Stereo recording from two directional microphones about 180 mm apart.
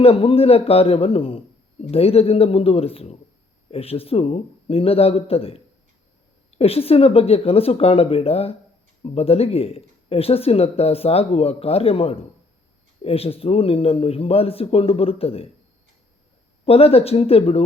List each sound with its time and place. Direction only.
0.0 s speech: 30° left (ahead or behind)
16.6 s speech: 35° left (ahead or behind)